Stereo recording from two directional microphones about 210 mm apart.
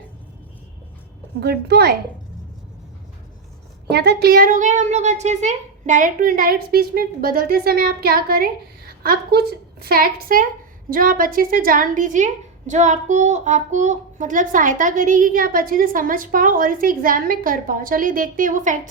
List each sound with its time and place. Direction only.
1.4 s a woman's voice: 50° right (ahead or behind)
3.8 s a woman's voice: 50° right (ahead or behind)